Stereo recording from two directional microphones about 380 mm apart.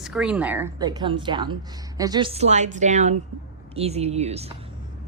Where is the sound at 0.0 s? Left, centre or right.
Centre.